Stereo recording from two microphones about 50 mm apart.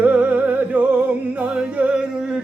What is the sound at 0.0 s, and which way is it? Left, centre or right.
Music, right.